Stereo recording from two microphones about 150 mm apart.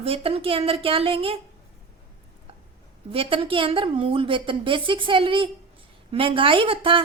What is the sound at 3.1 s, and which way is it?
A woman's voice, 40° right (ahead or behind).